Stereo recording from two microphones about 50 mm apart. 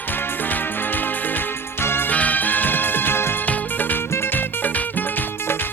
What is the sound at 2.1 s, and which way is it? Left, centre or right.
Music, left.